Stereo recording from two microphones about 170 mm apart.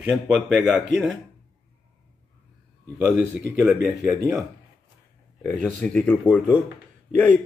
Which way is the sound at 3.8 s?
20° right (ahead or behind).